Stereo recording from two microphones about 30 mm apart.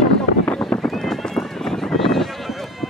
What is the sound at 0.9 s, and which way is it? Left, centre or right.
Run, centre.